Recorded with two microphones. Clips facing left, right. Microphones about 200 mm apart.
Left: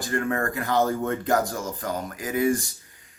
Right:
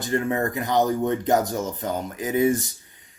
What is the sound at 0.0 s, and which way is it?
Speech, 20° right (ahead or behind).